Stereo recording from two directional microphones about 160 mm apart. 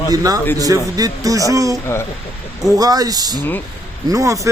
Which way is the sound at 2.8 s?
25° right (ahead or behind).